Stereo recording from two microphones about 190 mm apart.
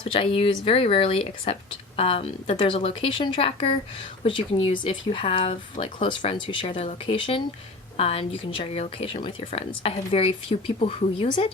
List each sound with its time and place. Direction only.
0.0 s speech: 30° left (ahead or behind)